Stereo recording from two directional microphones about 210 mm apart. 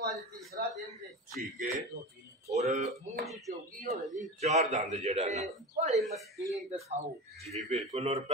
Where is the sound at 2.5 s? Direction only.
30° right (ahead or behind).